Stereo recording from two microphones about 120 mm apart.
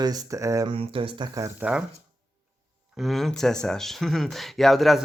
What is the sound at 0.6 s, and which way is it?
Speech, 50° right (ahead or behind).